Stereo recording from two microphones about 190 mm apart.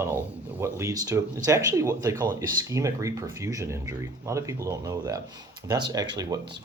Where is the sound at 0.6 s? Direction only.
15° right (ahead or behind).